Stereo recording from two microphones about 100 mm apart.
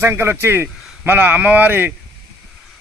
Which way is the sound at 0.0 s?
25° right (ahead or behind).